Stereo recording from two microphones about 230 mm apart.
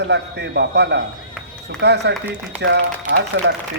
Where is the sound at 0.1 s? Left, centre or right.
Right.